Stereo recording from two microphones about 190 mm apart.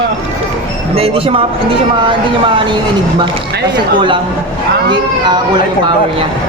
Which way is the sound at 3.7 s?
25° right (ahead or behind).